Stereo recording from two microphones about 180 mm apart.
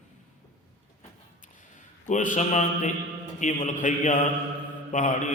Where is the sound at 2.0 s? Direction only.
45° left (ahead or behind).